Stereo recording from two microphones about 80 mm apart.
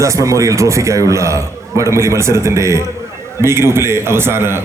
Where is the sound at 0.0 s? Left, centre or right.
Right.